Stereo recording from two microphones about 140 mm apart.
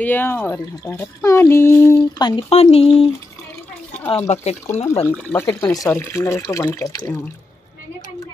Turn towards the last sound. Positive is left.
turn(degrees=25)  # may be behind; listen again after turning